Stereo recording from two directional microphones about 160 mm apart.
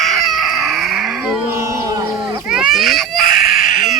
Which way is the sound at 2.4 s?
5° right (ahead or behind).